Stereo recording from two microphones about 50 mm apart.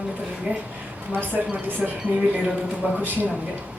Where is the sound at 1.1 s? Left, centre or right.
Right.